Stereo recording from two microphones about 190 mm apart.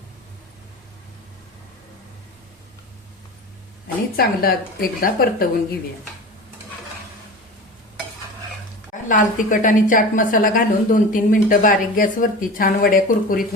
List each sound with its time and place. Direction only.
4.2 s a woman's voice: 50° left (ahead or behind)
9.0 s a woman's voice: 45° left (ahead or behind)